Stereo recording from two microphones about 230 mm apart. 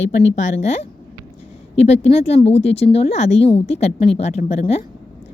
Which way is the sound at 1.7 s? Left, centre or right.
Left.